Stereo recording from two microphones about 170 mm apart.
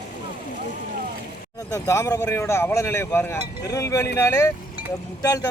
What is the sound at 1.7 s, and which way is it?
Speech, 15° left (ahead or behind).